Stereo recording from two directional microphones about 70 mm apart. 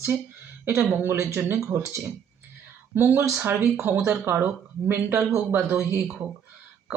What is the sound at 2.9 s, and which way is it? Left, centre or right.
Speech, right.